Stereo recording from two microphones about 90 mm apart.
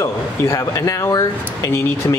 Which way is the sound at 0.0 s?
35° left (ahead or behind).